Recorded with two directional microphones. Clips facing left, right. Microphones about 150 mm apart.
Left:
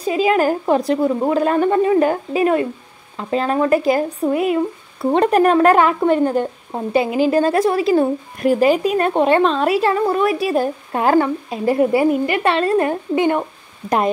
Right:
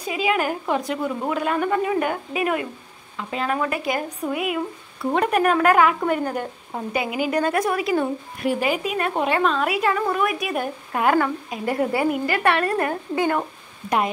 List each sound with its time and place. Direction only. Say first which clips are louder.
0.0 s a woman's voice: left 7 dB; 40° left (ahead or behind); by 13.5 s 20° left (ahead or behind)
13.8 s speech: left 5 dB; 35° left (ahead or behind)